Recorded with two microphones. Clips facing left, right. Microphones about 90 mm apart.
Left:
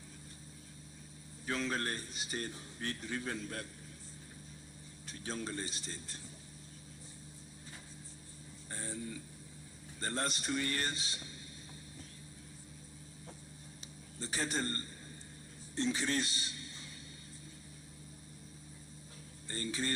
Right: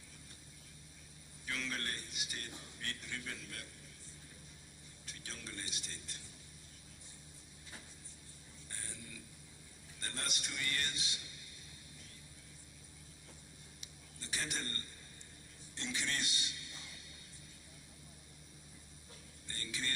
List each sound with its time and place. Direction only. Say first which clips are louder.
1.5 s speech: left 6 dB; 35° left (ahead or behind)
5.0 s speech: left 10 dB; 35° left (ahead or behind)
8.7 s a sound: left 10 dB; 35° left (ahead or behind)
10.0 s speech: left 8 dB; 35° left (ahead or behind)
13.8 s a sound: left 10 dB; 35° left (ahead or behind)
15.7 s a man's voice: left 8 dB; 35° left (ahead or behind)
19.5 s speech: left 7 dB; 35° left (ahead or behind)